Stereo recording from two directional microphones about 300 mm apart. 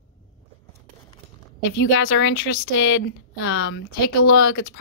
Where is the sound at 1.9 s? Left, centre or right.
Left.